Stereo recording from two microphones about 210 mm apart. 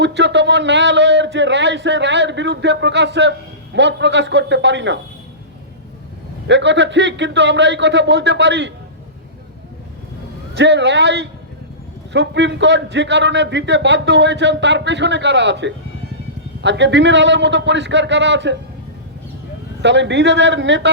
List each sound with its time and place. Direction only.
0.0 s a man's voice: 55° right (ahead or behind)
6.5 s a man's voice: 55° right (ahead or behind)
10.5 s a man's voice: 55° right (ahead or behind)
19.8 s a man's voice: 60° right (ahead or behind)